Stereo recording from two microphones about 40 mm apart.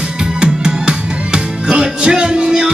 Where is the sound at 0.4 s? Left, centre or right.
Right.